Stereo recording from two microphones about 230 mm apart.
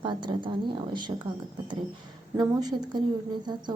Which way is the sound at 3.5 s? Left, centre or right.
Centre.